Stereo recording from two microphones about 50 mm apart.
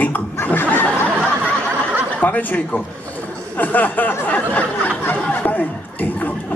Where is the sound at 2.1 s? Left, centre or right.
Left.